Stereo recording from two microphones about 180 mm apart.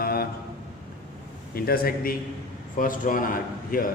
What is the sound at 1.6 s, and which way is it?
A man's voice, 55° left (ahead or behind).